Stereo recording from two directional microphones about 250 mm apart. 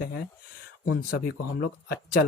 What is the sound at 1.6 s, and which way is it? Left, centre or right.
Speech, left.